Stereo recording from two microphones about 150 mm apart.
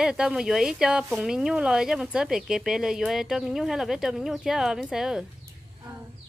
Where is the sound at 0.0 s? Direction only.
5° right (ahead or behind).